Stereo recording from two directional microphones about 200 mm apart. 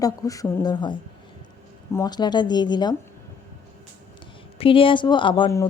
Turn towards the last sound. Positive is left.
turn(degrees=20)  # may be behind; listen again after turning